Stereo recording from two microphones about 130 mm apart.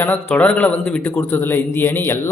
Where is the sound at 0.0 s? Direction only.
15° left (ahead or behind).